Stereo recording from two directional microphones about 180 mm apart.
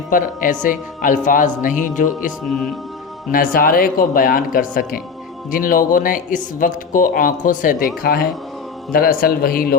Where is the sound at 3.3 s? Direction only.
55° left (ahead or behind).